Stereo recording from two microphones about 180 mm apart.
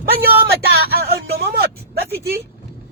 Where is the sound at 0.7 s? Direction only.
60° right (ahead or behind).